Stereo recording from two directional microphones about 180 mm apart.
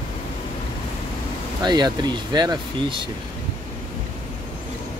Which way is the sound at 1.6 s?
25° right (ahead or behind).